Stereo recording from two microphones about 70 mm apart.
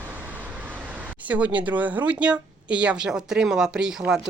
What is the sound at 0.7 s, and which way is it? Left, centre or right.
Speech, right.